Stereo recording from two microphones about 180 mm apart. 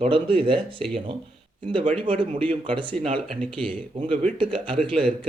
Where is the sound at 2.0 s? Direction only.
30° right (ahead or behind).